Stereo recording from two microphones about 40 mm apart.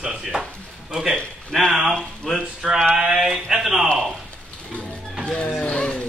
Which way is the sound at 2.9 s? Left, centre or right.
Centre.